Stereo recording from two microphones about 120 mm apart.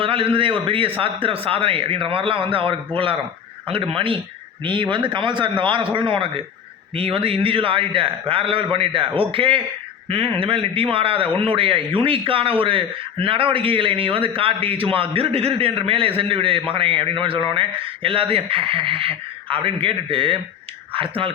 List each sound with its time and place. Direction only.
0.0 s a man's voice: 50° right (ahead or behind)